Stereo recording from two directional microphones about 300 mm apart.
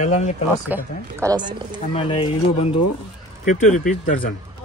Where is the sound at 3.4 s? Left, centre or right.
Left.